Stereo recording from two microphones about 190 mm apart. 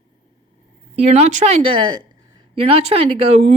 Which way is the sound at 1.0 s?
35° right (ahead or behind).